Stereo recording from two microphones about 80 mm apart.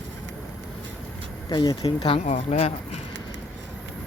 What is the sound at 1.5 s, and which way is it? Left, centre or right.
Speech, left.